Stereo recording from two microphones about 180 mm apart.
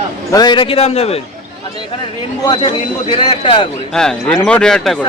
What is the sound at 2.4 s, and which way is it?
Speech, 25° left (ahead or behind).